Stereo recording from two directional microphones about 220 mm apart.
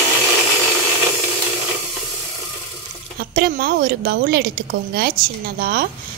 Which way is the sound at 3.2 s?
45° right (ahead or behind).